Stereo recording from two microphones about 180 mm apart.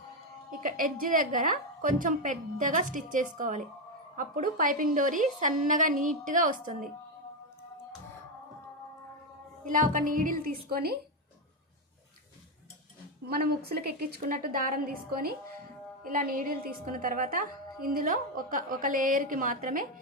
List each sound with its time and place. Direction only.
0.5 s a woman's voice: 50° right (ahead or behind)
9.6 s a woman's voice: 50° right (ahead or behind)
13.2 s a woman's voice: 60° right (ahead or behind)